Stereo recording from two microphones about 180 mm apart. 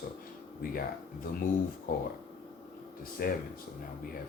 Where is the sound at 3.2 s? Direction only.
55° left (ahead or behind).